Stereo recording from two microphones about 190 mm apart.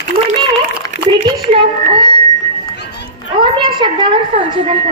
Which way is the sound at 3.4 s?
25° right (ahead or behind).